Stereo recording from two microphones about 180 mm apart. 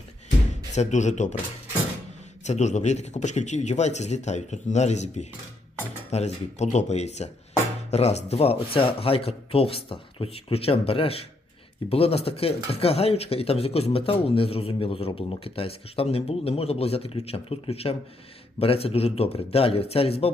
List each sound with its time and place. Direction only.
0.7 s speech: 40° left (ahead or behind)
2.4 s speech: 40° left (ahead or behind)